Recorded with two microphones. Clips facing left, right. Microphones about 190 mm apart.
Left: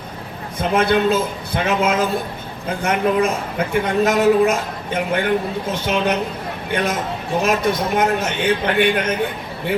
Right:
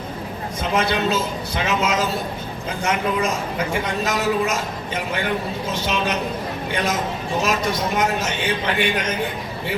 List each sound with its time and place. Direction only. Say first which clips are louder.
0.7 s a man's voice: left 5 dB; 55° left (ahead or behind)